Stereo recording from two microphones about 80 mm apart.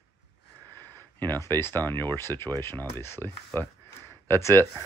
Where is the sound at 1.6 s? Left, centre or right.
Left.